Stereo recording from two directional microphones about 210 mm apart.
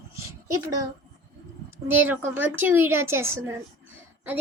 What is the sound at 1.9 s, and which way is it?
A woman's voice, 10° right (ahead or behind).